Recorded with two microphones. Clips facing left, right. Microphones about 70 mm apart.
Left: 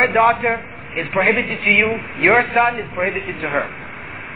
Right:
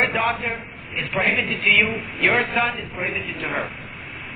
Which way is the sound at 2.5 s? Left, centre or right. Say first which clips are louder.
Left 7 dB; left.